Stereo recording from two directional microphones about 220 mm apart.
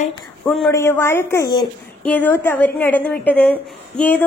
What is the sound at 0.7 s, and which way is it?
A woman's voice, 10° left (ahead or behind).